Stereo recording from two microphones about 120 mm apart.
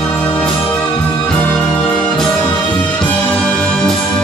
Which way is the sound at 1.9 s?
5° left (ahead or behind).